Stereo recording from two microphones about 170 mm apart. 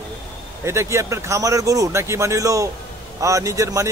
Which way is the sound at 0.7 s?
15° right (ahead or behind).